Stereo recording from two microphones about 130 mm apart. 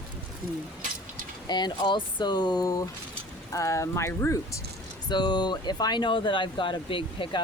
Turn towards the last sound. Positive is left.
turn(degrees=40)  # may be behind; listen again after turning